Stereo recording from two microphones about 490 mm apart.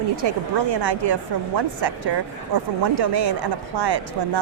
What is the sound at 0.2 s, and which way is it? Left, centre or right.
Speech, right.